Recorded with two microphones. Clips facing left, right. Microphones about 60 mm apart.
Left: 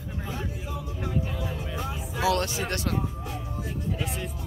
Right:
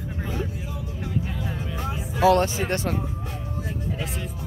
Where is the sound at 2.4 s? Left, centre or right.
Right.